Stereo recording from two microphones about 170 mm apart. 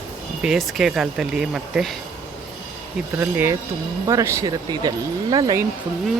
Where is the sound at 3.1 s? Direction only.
15° right (ahead or behind).